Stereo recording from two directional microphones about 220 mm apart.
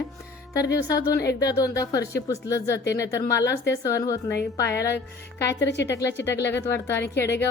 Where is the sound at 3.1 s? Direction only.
15° left (ahead or behind).